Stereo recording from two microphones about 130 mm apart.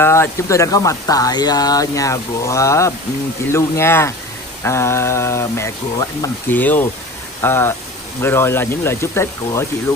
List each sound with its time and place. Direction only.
0.0 s speech: 20° left (ahead or behind)
6.5 s speech: 15° left (ahead or behind)